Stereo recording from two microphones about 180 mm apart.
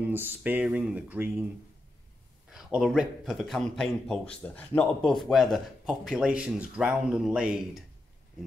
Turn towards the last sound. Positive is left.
turn(degrees=-5)  # may be behind; listen again after turning